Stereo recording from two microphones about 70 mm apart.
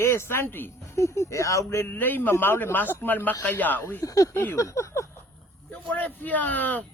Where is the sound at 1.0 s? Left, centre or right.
Left.